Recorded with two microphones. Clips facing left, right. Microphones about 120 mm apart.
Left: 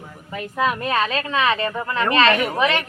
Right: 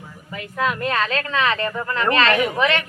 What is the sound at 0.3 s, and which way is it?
Speech, 20° left (ahead or behind).